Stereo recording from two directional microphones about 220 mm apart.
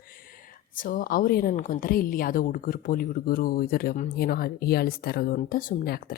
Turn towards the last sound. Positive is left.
turn(degrees=45)  # may be behind; listen again after turning